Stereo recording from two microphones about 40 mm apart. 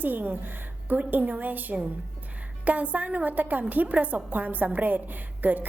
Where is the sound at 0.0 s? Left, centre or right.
Right.